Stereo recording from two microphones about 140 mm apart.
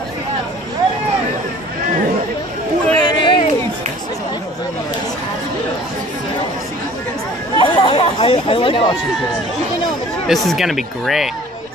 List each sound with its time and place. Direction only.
3.0 s a sound: 35° left (ahead or behind)
7.5 s chatter: 35° left (ahead or behind)
10.2 s speech: centre (ahead or behind)